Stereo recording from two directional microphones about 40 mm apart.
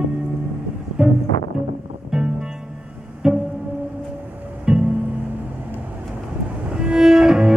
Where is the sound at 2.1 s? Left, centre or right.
Centre.